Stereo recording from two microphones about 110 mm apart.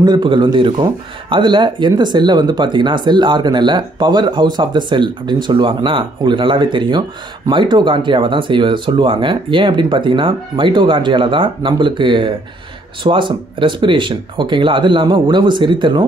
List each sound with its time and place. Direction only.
0.0 s speech: 45° right (ahead or behind)